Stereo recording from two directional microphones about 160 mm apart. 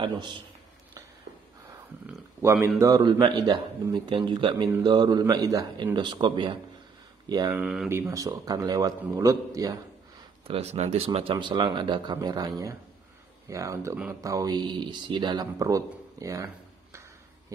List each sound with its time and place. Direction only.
0.0 s a man's voice: 30° right (ahead or behind)
2.0 s a man's voice: 15° right (ahead or behind)
7.5 s speech: 5° right (ahead or behind)
7.9 s a man's voice: 20° right (ahead or behind)
10.4 s a man's voice: 40° right (ahead or behind); by 17.0 s 20° right (ahead or behind)